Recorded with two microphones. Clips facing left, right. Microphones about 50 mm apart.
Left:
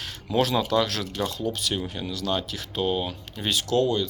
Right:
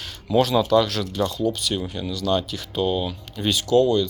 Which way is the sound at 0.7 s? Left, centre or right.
Left.